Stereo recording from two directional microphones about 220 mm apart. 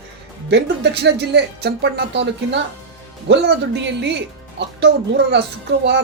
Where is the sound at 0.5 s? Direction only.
50° right (ahead or behind).